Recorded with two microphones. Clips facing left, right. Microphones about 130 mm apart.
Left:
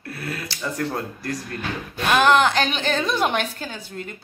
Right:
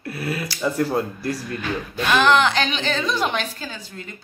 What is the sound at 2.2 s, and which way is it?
A woman's voice, 50° left (ahead or behind).